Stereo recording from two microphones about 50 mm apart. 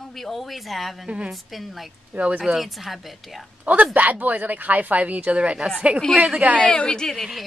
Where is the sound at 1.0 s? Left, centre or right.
Right.